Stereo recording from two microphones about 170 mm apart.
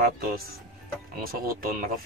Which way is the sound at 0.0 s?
60° right (ahead or behind).